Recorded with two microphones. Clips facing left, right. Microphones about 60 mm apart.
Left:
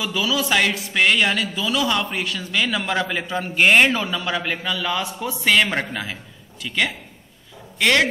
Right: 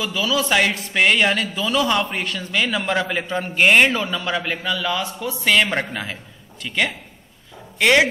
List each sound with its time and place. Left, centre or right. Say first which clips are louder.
0.0 s a man's voice: right 1 dB; centre
0.5 s a man's voice: right 1 dB; centre
4.7 s a man's voice: right 1 dB; centre
5.4 s a man's voice: even; centre